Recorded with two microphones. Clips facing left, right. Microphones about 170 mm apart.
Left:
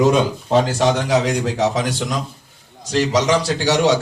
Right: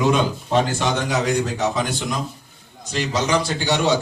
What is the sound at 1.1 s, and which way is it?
Speech, 90° left.